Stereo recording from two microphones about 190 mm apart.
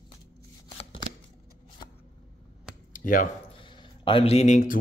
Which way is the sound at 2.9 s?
45° left (ahead or behind).